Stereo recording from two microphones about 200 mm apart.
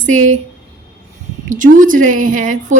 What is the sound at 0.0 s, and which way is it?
Speech, 40° right (ahead or behind).